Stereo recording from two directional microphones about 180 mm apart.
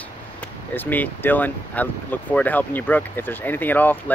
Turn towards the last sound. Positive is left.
turn(degrees=10)  # may be behind; listen again after turning